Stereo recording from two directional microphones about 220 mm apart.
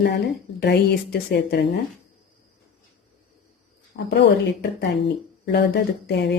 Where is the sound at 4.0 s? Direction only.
50° left (ahead or behind).